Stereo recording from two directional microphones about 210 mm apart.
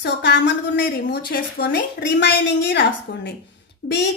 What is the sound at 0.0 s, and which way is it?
A woman's voice, 55° left (ahead or behind).